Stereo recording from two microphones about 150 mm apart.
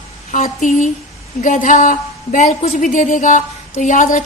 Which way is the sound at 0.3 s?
60° left (ahead or behind).